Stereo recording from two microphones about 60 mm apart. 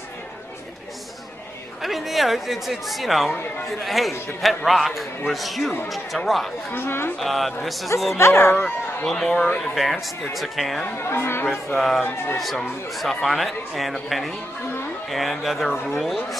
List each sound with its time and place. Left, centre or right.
1.8 s speech: centre
6.7 s speech: left
7.2 s speech: centre
8.2 s speech: left
8.6 s speech: centre
11.0 s speech: left
11.5 s speech: centre